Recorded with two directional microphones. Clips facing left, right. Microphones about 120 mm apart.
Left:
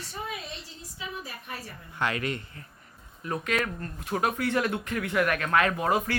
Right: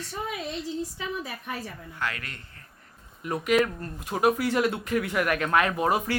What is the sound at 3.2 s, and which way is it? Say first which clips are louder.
Speech: right 6 dB; 15° right (ahead or behind).